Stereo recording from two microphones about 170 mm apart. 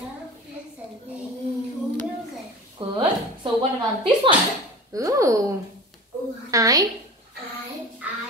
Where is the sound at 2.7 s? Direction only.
30° right (ahead or behind).